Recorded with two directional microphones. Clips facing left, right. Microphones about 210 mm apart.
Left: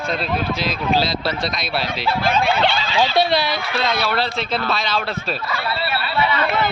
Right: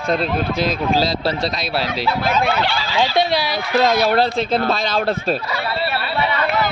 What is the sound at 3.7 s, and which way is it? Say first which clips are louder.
Speech: right 8 dB; 45° right (ahead or behind).